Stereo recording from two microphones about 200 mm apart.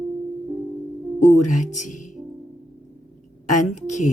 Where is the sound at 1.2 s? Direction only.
35° left (ahead or behind).